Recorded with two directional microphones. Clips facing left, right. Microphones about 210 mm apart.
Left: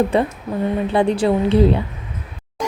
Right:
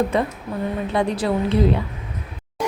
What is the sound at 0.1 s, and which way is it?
A woman's voice, 30° left (ahead or behind).